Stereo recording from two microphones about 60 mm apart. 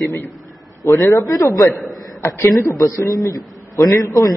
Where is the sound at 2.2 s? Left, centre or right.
Left.